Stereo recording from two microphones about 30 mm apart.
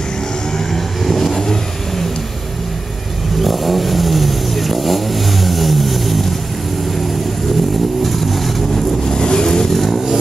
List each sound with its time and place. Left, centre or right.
1.0 s vehicle: centre
3.3 s vehicle: centre
8.0 s vehicle: centre
9.0 s vehicle: centre
9.8 s vehicle: centre